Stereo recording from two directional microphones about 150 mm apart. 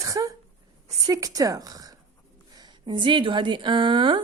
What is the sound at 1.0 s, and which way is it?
A woman's voice, 25° right (ahead or behind).